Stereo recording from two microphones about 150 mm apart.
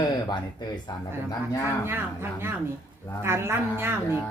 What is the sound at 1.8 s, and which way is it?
Speech, 15° right (ahead or behind).